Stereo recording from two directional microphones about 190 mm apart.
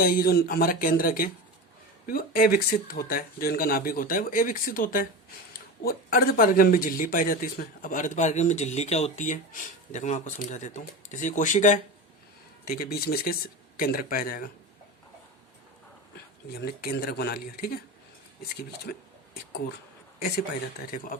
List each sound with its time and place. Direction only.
0.0 s speech: 50° left (ahead or behind)
12.6 s speech: 50° left (ahead or behind)
16.6 s speech: 55° left (ahead or behind)
18.9 s speech: 55° left (ahead or behind)
20.9 s speech: 45° left (ahead or behind)